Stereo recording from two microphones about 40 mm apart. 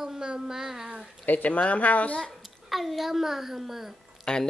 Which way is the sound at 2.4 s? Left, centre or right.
Centre.